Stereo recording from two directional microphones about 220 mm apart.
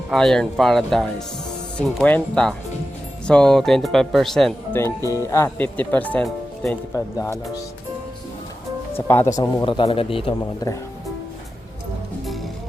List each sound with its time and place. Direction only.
0.1 s speech: centre (ahead or behind)
5.0 s speech: 15° left (ahead or behind)
9.0 s speech: 10° left (ahead or behind)